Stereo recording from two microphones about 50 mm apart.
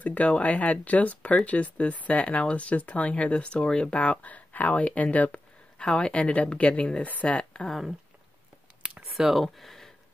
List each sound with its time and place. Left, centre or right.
0.0 s a woman's voice: left
9.1 s speech: centre